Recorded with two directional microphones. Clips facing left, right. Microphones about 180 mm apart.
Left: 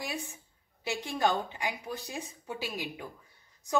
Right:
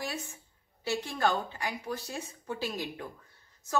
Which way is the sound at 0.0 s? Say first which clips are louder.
Even; 15° left (ahead or behind).